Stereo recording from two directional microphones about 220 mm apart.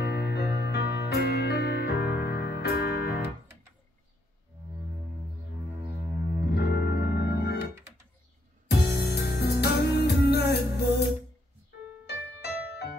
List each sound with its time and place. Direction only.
0.0 s music: 45° left (ahead or behind)
6.5 s music: 45° left (ahead or behind)
8.6 s music: 45° left (ahead or behind)
12.1 s music: 50° left (ahead or behind)